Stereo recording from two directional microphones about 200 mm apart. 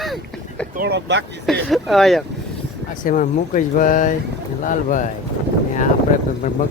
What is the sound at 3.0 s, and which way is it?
A man's voice, 40° left (ahead or behind).